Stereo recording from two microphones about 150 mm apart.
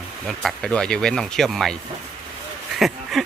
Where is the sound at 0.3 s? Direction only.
Centre (ahead or behind).